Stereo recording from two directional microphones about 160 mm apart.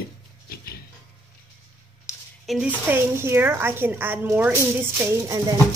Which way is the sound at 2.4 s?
5° right (ahead or behind).